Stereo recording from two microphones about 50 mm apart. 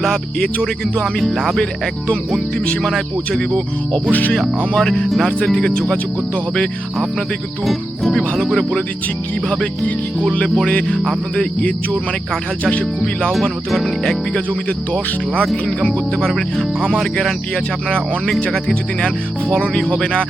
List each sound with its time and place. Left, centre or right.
0.0 s music: centre
1.0 s speech: centre
4.1 s music: left
4.7 s music: centre
5.5 s speech: left
7.6 s speech: centre
9.5 s speech: centre
10.9 s speech: centre
13.3 s music: centre
18.7 s speech: centre